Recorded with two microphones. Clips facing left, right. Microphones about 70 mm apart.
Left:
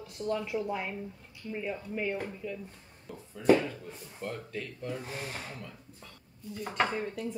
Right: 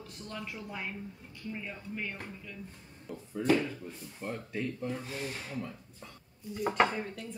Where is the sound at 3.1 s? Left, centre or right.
Centre.